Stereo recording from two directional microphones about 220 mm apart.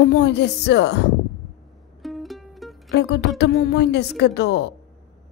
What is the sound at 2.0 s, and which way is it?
Music, centre (ahead or behind).